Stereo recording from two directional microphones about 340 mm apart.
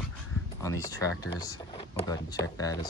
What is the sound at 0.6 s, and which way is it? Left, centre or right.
Speech, centre.